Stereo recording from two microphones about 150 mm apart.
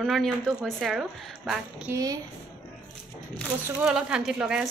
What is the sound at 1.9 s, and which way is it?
Speech, 25° right (ahead or behind).